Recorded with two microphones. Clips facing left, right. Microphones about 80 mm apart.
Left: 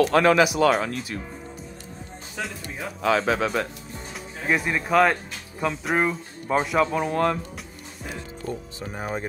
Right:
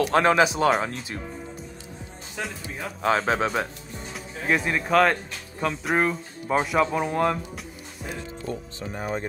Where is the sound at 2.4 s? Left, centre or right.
Centre.